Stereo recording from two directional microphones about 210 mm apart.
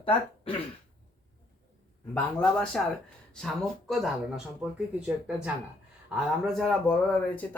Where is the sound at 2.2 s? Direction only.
5° left (ahead or behind).